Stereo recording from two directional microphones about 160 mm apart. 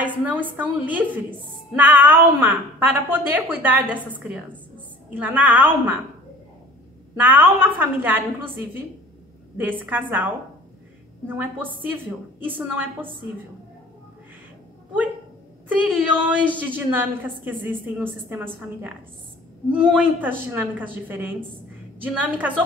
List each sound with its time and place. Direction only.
0.0 s a woman's voice: 10° right (ahead or behind)
7.2 s a woman's voice: 10° right (ahead or behind)
9.6 s a woman's voice: 10° right (ahead or behind)
15.7 s a woman's voice: 5° right (ahead or behind)